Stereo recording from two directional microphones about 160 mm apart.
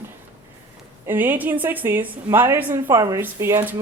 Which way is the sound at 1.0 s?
10° right (ahead or behind).